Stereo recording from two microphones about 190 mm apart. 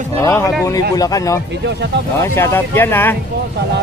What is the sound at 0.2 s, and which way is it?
Speech, 15° left (ahead or behind).